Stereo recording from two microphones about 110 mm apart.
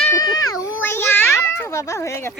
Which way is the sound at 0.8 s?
20° left (ahead or behind).